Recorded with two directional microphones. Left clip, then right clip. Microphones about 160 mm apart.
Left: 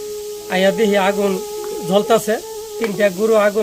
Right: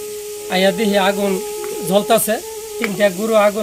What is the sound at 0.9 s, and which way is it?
Speech, 35° left (ahead or behind).